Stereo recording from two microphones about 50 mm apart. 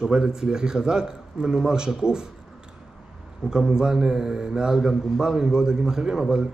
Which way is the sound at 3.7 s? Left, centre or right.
Centre.